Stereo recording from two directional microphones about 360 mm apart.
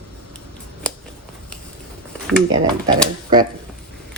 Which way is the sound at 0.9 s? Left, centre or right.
Centre.